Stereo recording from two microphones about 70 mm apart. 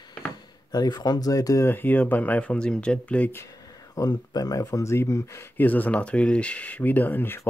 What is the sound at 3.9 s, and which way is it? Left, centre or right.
Speech, left.